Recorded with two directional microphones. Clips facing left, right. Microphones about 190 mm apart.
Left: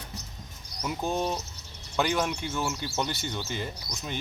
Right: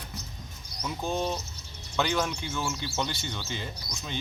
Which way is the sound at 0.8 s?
15° left (ahead or behind).